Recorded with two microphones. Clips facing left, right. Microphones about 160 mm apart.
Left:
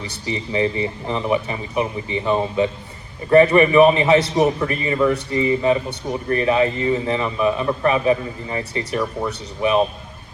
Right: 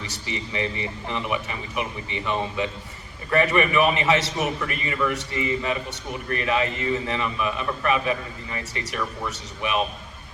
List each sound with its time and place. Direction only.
0.0 s a man's voice: 35° left (ahead or behind)